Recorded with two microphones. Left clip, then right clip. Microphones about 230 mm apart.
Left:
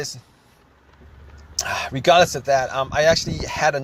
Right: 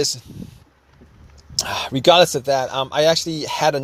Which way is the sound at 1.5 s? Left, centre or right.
Right.